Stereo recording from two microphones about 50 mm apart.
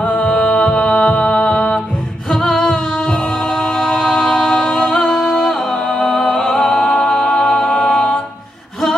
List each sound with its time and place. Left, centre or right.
0.0 s music: left
2.3 s music: centre